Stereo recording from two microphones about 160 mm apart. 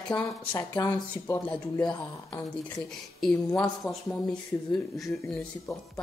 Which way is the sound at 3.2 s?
5° left (ahead or behind).